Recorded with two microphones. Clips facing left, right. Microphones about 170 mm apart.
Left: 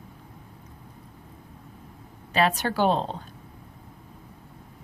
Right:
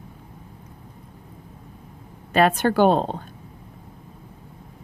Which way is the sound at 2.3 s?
50° right (ahead or behind).